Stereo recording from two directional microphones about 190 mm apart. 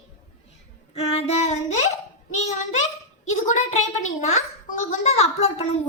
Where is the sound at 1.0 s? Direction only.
35° left (ahead or behind).